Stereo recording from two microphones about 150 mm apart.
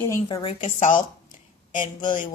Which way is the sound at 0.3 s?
35° left (ahead or behind).